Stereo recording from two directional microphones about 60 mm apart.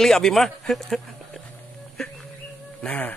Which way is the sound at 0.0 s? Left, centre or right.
Centre.